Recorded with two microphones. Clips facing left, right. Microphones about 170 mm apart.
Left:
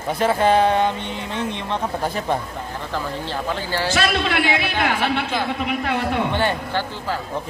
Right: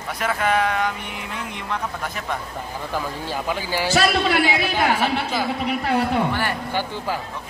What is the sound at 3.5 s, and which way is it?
Speech, 10° right (ahead or behind).